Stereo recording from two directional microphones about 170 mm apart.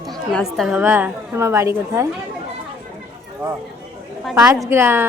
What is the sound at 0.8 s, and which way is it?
A woman's voice, 10° right (ahead or behind).